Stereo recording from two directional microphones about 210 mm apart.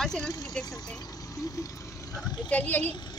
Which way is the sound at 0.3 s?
15° left (ahead or behind).